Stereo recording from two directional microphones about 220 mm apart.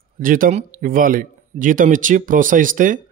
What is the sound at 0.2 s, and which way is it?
Speech, 40° right (ahead or behind).